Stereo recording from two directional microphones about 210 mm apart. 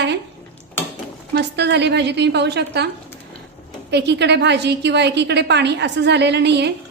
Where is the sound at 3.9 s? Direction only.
55° right (ahead or behind).